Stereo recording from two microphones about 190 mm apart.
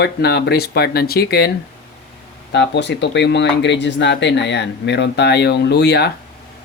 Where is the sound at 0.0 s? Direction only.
60° left (ahead or behind).